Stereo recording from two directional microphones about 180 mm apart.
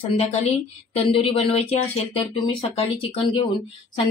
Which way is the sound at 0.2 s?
35° left (ahead or behind).